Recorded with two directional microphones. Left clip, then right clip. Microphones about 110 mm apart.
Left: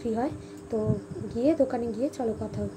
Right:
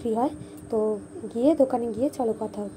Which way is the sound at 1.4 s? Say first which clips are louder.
Right 3 dB; 55° right (ahead or behind).